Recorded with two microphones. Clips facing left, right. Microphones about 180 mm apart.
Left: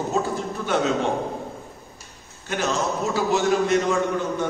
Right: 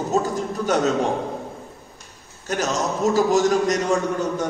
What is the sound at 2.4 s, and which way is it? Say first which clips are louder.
A man's voice: right 1 dB; 40° right (ahead or behind).